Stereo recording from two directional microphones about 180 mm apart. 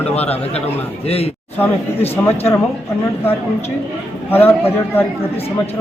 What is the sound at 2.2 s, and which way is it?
Speech, 15° left (ahead or behind).